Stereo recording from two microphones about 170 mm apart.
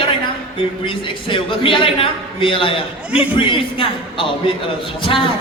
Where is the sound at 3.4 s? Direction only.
30° left (ahead or behind).